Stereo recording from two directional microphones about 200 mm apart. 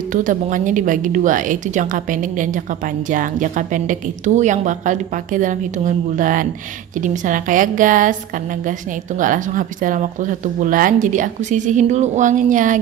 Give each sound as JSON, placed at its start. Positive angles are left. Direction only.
{"t": 0.1, "sound": "speech", "side_deg": -40}
{"t": 9.2, "sound": "speech", "side_deg": -40}